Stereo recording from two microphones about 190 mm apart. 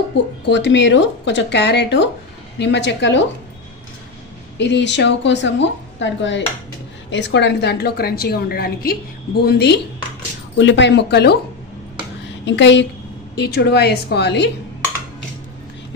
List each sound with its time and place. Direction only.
0.5 s a woman's voice: 70° left (ahead or behind)
4.6 s a woman's voice: 65° left (ahead or behind)
10.6 s a woman's voice: 70° left (ahead or behind)
12.4 s a woman's voice: 70° left (ahead or behind)